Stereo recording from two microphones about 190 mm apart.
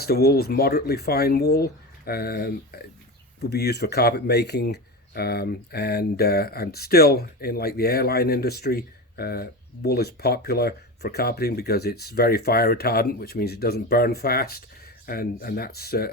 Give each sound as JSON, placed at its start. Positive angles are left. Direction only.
{"t": 0.0, "sound": "speech", "side_deg": 55}